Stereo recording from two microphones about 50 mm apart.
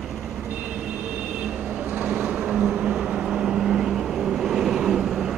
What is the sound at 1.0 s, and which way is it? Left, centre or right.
Vehicle, centre.